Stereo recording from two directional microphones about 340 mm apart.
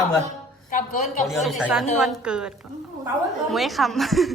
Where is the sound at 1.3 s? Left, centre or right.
Centre.